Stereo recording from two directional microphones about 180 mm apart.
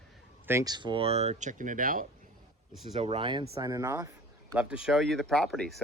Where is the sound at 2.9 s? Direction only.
30° right (ahead or behind).